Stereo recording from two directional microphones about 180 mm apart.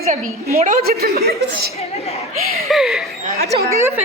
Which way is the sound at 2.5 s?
Centre (ahead or behind).